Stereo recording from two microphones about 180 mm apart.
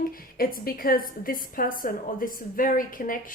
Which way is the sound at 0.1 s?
55° left (ahead or behind).